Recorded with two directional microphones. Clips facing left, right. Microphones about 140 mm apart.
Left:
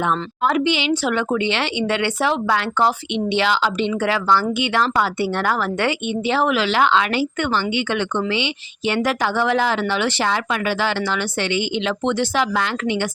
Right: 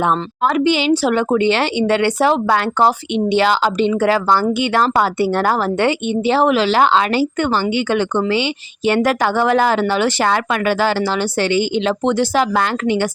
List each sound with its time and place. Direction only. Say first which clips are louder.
0.0 s speech: right 3 dB; 40° right (ahead or behind)